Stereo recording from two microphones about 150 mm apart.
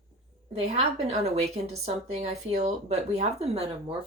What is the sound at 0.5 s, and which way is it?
Speech, 45° right (ahead or behind).